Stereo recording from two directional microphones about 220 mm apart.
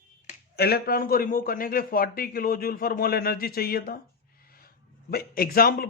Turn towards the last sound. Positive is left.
turn(degrees=40)  # may be behind; listen again after turning